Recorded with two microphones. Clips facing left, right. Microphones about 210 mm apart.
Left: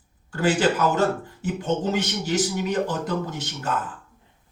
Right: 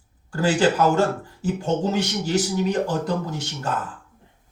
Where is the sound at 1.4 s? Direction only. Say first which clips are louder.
Right 2 dB; 35° right (ahead or behind).